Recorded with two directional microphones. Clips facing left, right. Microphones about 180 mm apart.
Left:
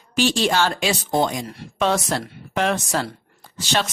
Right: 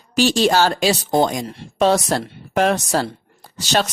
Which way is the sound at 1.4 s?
25° right (ahead or behind).